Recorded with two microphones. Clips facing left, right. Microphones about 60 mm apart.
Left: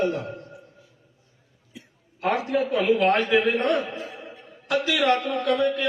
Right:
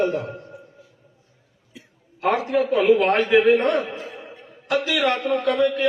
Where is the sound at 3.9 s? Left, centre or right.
Centre.